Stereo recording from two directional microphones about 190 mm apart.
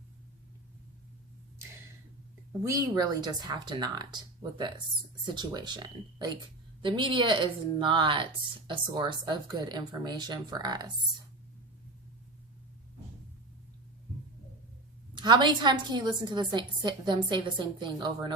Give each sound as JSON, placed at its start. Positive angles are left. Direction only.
{"t": 2.6, "sound": "a woman's voice", "side_deg": -20}
{"t": 15.1, "sound": "a woman's voice", "side_deg": -25}